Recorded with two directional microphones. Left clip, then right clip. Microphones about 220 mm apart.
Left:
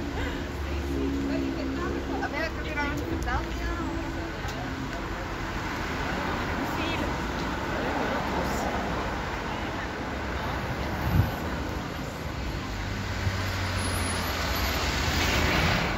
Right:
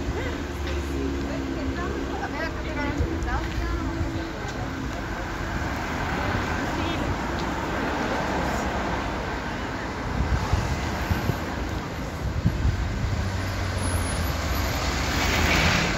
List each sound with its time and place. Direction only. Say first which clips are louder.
15.0 s vehicle: right 4 dB; 45° right (ahead or behind)